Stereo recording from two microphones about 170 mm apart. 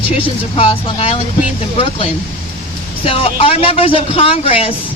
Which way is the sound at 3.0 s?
35° left (ahead or behind).